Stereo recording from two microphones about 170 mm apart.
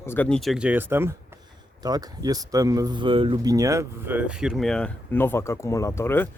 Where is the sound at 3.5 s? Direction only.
20° right (ahead or behind); by 6.3 s 15° left (ahead or behind).